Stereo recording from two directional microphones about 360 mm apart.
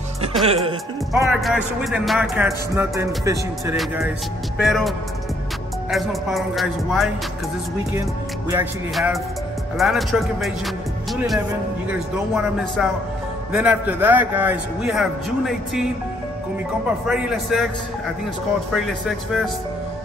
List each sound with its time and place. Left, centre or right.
0.5 s speech: centre
1.1 s speech: centre
17.0 s speech: centre
18.7 s speech: centre